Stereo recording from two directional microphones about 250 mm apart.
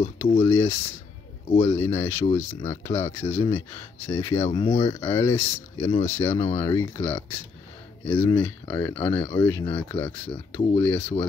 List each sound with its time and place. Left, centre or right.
0.3 s speech: centre
2.2 s speech: left
2.7 s speech: centre
4.5 s speech: left
5.0 s speech: centre
6.3 s speech: left
6.6 s speech: centre
8.9 s speech: left
9.4 s speech: centre